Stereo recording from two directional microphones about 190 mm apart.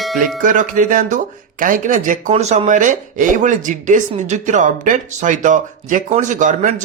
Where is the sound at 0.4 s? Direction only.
45° right (ahead or behind).